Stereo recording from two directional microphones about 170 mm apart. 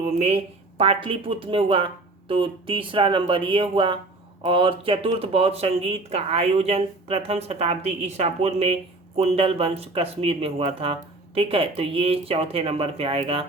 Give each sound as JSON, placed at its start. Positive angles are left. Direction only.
{"t": 0.0, "sound": "speech", "side_deg": -40}